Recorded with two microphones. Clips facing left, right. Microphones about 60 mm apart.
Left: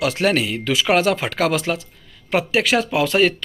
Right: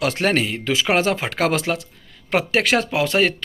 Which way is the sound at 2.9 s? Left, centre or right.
Right.